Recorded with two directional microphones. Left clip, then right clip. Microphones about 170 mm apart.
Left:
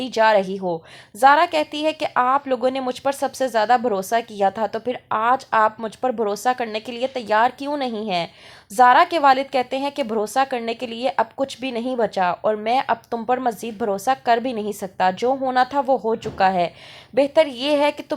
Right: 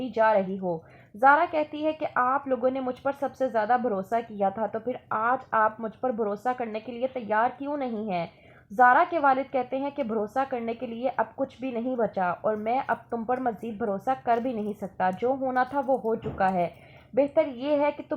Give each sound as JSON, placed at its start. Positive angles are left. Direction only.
{"t": 0.0, "sound": "a woman's voice", "side_deg": 30}